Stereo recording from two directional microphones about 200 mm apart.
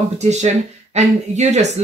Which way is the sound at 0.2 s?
35° right (ahead or behind).